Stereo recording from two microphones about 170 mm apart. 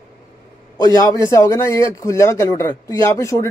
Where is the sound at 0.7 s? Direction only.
20° left (ahead or behind).